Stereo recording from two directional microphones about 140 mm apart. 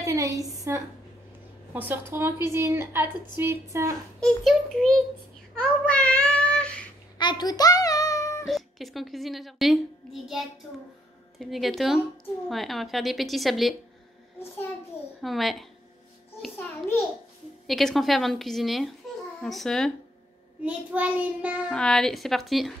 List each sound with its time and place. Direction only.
0.0 s a woman's voice: 25° right (ahead or behind)
4.2 s a child's voice: centre (ahead or behind)
5.6 s child singing: 10° left (ahead or behind)
7.2 s a sound: 30° left (ahead or behind)
8.5 s a woman's voice: centre (ahead or behind)
11.3 s a woman's voice: centre (ahead or behind)
15.2 s a woman's voice: centre (ahead or behind)
17.6 s a woman's voice: centre (ahead or behind)
20.6 s a woman's voice: 10° right (ahead or behind)
21.7 s a woman's voice: 5° left (ahead or behind)